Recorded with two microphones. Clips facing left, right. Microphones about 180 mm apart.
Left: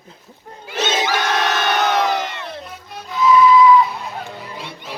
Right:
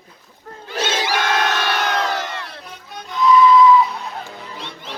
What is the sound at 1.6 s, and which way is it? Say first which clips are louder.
Crowd: left 3 dB; 20° left (ahead or behind).